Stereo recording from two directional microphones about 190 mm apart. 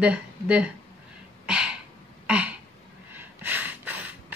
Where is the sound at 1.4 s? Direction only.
5° right (ahead or behind).